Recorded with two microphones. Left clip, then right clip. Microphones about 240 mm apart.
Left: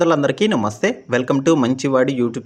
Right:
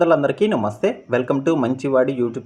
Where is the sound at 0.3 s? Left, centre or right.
Left.